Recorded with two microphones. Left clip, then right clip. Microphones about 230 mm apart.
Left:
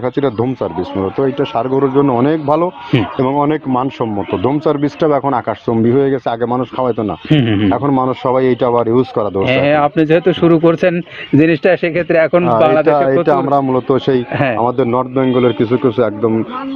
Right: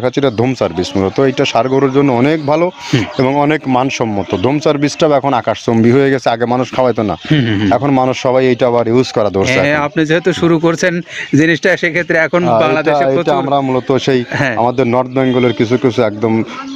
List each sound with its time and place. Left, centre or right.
0.0 s speech: right
7.3 s speech: right
7.7 s a man's voice: right
9.5 s a man's voice: right